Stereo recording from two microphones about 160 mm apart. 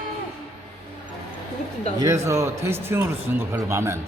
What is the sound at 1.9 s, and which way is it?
Speech, 20° right (ahead or behind).